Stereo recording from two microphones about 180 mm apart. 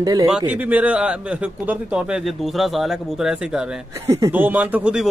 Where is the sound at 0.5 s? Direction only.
10° right (ahead or behind).